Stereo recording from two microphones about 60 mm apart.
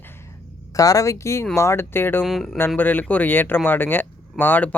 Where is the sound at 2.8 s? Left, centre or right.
Left.